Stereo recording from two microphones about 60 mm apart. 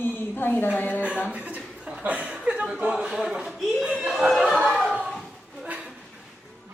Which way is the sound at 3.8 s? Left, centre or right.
Centre.